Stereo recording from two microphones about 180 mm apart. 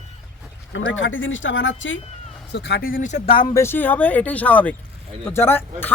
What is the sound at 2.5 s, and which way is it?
Speech, 70° left (ahead or behind).